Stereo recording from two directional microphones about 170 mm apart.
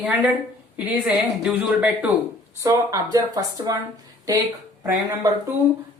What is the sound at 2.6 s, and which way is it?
Speech, 20° right (ahead or behind).